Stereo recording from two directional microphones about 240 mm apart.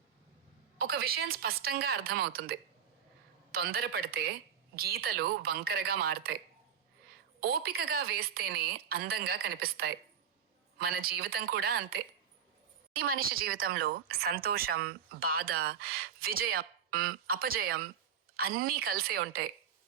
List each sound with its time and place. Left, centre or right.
0.8 s speech: right
7.4 s speech: right